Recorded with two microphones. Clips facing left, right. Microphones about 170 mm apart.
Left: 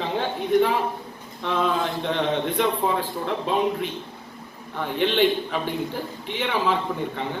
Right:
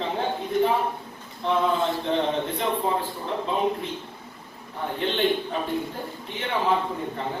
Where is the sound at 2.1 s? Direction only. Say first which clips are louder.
Left 1 dB; 75° left (ahead or behind).